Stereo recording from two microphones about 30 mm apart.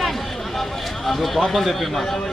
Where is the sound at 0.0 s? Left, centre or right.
Centre.